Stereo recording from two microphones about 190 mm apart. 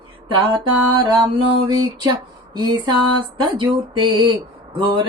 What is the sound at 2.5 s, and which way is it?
Music, 20° right (ahead or behind).